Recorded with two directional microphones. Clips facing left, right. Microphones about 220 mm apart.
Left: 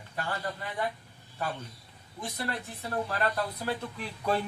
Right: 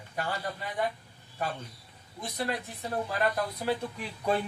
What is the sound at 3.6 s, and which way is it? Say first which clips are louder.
Speech: right 3 dB; 15° right (ahead or behind).